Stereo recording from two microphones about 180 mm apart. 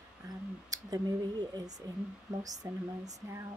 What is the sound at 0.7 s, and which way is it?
Speech, 20° right (ahead or behind).